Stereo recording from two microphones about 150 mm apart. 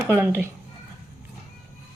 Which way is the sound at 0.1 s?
15° right (ahead or behind).